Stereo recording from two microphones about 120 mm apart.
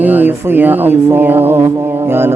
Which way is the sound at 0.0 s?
15° right (ahead or behind).